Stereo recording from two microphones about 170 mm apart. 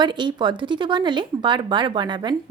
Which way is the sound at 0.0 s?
25° right (ahead or behind).